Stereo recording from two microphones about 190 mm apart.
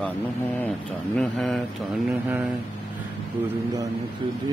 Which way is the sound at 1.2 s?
Centre (ahead or behind).